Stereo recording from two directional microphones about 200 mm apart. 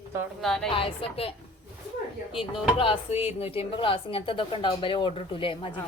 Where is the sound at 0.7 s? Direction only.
30° left (ahead or behind).